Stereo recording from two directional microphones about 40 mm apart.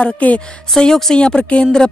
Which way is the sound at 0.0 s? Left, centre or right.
Left.